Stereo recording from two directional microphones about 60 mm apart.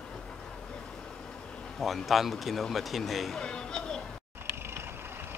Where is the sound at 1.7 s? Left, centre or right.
Centre.